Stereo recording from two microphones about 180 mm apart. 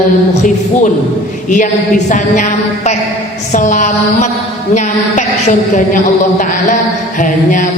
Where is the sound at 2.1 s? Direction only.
45° left (ahead or behind).